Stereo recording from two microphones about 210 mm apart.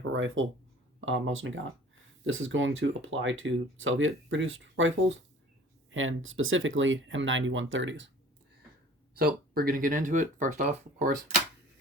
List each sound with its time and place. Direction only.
0.0 s speech: 65° right (ahead or behind)
9.1 s speech: 45° right (ahead or behind)